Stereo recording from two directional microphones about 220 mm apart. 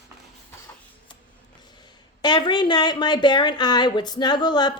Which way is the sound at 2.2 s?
20° left (ahead or behind).